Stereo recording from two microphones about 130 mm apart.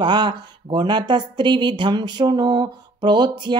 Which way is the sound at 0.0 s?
35° right (ahead or behind).